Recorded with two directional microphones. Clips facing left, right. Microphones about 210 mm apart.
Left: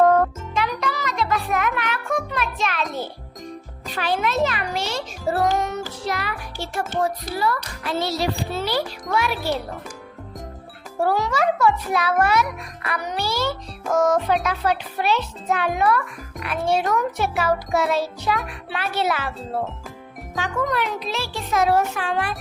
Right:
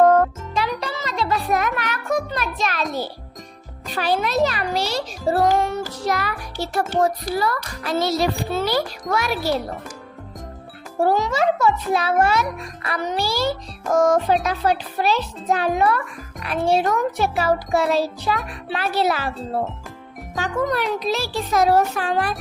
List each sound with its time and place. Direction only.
0.0 s music: 5° right (ahead or behind)
0.8 s music: 30° right (ahead or behind)
3.9 s a child's voice: 35° right (ahead or behind)
5.5 s music: 30° right (ahead or behind)
6.1 s a child's voice: 40° right (ahead or behind)
11.0 s a child's voice: 20° right (ahead or behind)
20.3 s a child's voice: 40° right (ahead or behind)